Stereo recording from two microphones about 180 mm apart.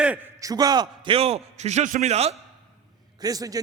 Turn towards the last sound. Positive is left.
turn(degrees=-20)  # may be behind; listen again after turning